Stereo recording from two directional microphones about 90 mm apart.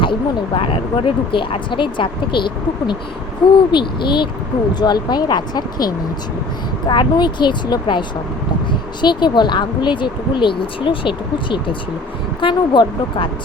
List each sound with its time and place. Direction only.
0.0 s speech: 70° left (ahead or behind)